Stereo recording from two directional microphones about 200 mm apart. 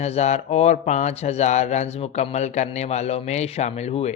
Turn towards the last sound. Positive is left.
turn(degrees=35)  # may be behind; listen again after turning